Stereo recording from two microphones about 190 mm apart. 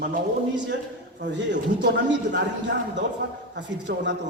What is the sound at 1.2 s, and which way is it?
A man's voice, 70° right (ahead or behind).